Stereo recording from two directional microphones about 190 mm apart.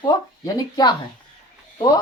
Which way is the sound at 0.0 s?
20° left (ahead or behind).